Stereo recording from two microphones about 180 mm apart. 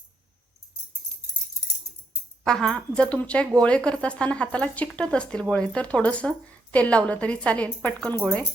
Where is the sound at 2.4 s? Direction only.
5° left (ahead or behind).